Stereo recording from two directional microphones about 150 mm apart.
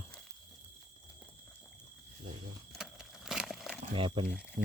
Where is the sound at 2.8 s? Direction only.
5° right (ahead or behind).